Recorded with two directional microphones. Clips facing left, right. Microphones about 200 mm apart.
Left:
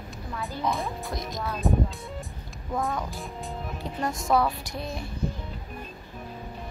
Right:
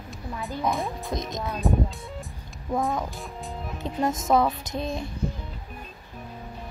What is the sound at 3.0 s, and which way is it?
Speech, centre (ahead or behind).